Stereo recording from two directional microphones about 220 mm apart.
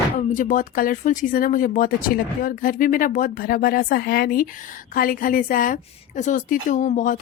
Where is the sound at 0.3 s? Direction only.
35° left (ahead or behind).